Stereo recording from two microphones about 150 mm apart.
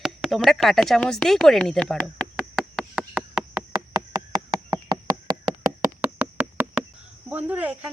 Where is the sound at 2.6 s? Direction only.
Centre (ahead or behind).